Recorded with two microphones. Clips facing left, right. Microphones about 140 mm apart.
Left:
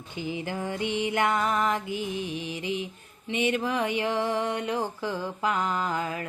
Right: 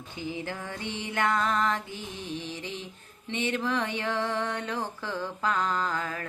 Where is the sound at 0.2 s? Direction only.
15° left (ahead or behind).